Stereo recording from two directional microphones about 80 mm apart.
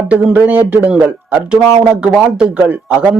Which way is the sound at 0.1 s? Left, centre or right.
Right.